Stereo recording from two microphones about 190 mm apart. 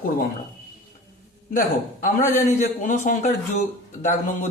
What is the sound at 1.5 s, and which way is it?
A man's voice, 45° left (ahead or behind).